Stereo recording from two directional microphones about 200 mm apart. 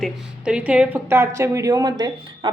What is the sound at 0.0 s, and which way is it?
Speech, 5° right (ahead or behind).